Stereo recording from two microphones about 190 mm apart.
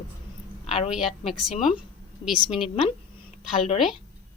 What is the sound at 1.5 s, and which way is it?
Speech, 35° left (ahead or behind).